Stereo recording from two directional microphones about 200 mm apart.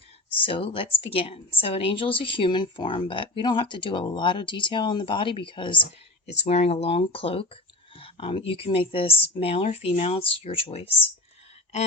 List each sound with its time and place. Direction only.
0.3 s a woman's voice: 25° left (ahead or behind)